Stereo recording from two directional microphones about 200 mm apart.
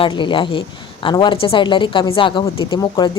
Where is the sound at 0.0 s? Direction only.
25° left (ahead or behind).